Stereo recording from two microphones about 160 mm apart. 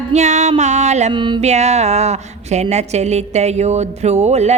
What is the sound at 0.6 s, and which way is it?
Speech, 45° right (ahead or behind).